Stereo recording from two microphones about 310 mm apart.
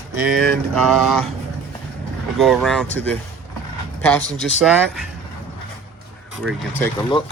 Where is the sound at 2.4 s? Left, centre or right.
Centre.